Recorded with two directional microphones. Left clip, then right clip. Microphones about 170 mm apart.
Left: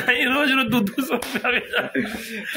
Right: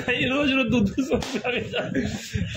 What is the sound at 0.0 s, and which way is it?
A man's voice, centre (ahead or behind).